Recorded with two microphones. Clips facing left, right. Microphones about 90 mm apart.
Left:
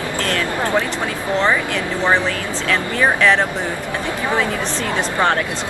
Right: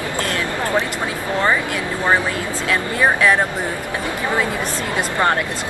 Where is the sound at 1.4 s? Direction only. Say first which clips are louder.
Right 1 dB; 10° right (ahead or behind).